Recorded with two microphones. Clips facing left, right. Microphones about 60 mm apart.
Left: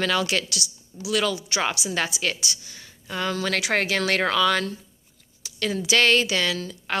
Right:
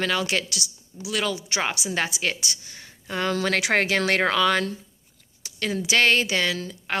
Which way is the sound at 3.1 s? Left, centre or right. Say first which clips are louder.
Right 2 dB; right.